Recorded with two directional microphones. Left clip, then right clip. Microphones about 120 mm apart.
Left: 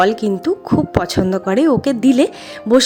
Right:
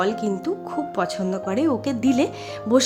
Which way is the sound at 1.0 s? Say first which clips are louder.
Left 7 dB; 60° left (ahead or behind).